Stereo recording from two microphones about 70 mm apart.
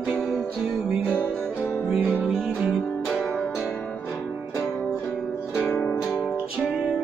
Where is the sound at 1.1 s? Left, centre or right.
Left.